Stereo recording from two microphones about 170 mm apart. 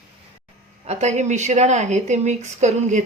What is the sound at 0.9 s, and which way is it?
Speech, 40° right (ahead or behind).